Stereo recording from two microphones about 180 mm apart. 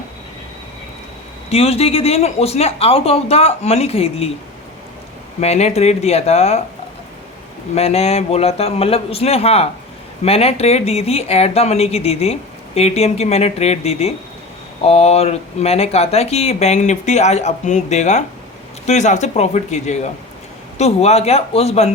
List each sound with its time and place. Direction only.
1.5 s speech: 35° left (ahead or behind)
5.4 s speech: 40° left (ahead or behind)
7.8 s speech: 35° left (ahead or behind)